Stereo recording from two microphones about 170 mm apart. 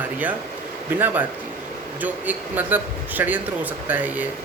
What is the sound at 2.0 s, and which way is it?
A man's voice, 10° right (ahead or behind).